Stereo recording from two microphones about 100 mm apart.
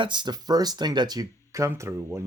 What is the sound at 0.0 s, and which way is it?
Speech, 50° right (ahead or behind).